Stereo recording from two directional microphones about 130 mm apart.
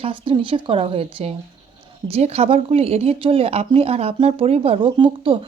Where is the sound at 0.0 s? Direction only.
40° right (ahead or behind).